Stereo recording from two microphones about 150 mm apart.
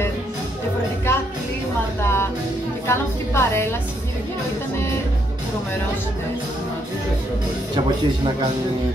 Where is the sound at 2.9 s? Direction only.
15° left (ahead or behind).